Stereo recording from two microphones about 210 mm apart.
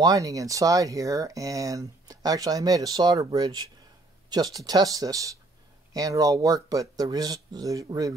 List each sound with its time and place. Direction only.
0.0 s speech: 15° right (ahead or behind)